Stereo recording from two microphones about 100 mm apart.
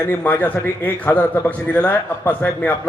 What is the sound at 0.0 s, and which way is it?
A man's voice, 20° left (ahead or behind).